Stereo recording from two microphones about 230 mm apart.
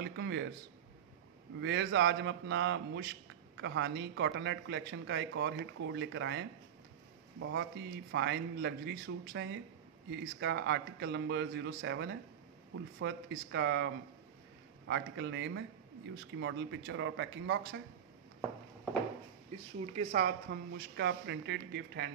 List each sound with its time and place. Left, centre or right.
0.0 s a sound: right
1.6 s a man's voice: right
20.1 s a man's voice: right